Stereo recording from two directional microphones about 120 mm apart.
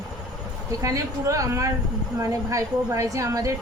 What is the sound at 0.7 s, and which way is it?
A woman's voice, 30° right (ahead or behind).